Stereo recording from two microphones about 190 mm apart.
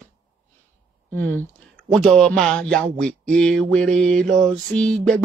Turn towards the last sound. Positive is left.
turn(degrees=5)  # may be behind; listen again after turning